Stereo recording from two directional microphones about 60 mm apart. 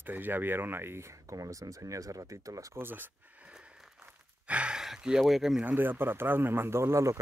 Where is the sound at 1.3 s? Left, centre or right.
Right.